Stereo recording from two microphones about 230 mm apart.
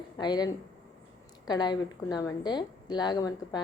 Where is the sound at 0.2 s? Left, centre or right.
Centre.